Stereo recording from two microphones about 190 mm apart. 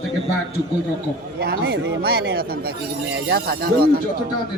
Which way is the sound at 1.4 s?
60° right (ahead or behind).